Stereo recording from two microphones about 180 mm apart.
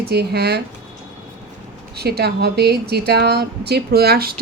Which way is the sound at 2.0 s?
60° right (ahead or behind).